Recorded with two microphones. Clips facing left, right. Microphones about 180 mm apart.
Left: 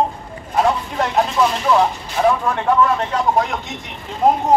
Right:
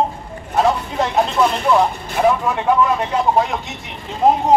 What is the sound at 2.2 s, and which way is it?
Speech, 10° right (ahead or behind).